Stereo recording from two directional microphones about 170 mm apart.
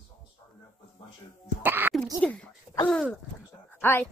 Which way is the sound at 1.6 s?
10° right (ahead or behind).